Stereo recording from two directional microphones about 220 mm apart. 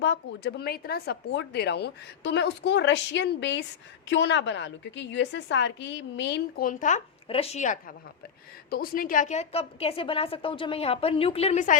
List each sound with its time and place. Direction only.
0.0 s a woman's voice: 50° left (ahead or behind); by 11.8 s 35° left (ahead or behind)